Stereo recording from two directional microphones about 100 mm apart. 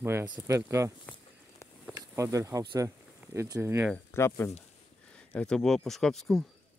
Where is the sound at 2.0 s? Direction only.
35° right (ahead or behind).